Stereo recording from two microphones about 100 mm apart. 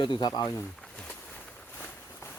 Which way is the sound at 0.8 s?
10° left (ahead or behind).